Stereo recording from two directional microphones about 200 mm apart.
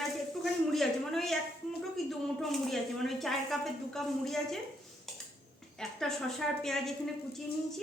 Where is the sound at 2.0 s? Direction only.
Centre (ahead or behind).